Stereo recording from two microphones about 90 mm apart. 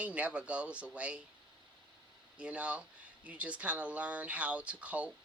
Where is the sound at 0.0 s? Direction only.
15° right (ahead or behind).